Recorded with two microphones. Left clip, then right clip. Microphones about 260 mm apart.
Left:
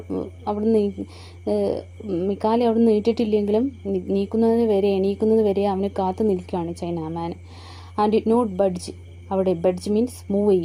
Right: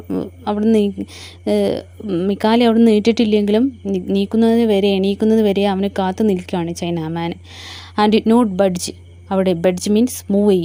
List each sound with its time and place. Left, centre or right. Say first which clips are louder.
0.6 s speech: right 4 dB; right